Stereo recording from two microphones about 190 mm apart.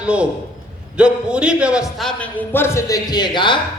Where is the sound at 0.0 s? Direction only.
5° right (ahead or behind).